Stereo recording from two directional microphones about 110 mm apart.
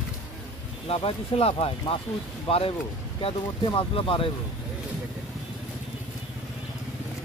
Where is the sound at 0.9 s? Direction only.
65° left (ahead or behind).